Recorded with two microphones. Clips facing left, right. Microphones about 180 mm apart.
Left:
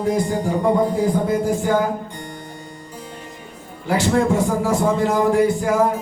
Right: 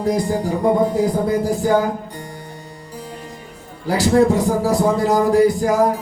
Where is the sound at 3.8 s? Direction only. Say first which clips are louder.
Right 3 dB; 35° right (ahead or behind).